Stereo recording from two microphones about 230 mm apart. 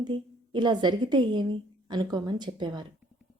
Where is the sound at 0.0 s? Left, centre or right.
Centre.